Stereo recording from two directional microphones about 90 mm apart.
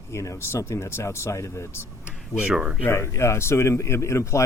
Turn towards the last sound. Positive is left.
turn(degrees=35)  # may be behind; listen again after turning